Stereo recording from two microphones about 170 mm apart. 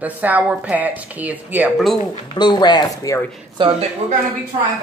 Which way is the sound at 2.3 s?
25° left (ahead or behind).